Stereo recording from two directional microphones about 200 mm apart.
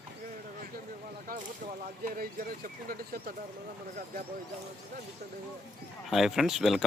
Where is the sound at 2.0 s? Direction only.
45° right (ahead or behind).